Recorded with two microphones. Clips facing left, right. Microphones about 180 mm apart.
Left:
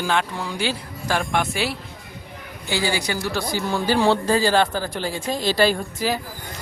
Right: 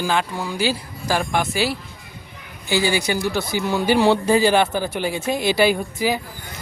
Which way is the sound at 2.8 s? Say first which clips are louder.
Right 2 dB; 20° right (ahead or behind).